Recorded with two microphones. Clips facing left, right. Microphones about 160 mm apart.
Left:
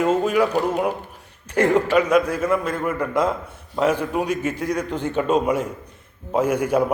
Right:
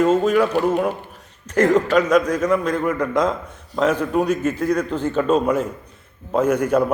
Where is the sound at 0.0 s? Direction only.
10° left (ahead or behind).